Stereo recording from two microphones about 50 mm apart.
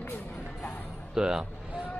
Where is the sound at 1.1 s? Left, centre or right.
Centre.